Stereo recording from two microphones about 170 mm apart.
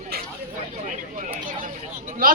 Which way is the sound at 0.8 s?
50° right (ahead or behind).